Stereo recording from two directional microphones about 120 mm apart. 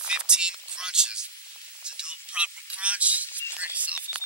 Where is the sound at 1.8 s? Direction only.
10° right (ahead or behind).